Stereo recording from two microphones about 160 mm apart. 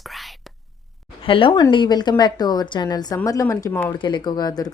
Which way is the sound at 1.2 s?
35° left (ahead or behind).